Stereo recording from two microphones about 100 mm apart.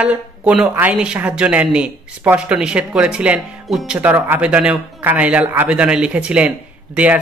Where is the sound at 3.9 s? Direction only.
20° right (ahead or behind).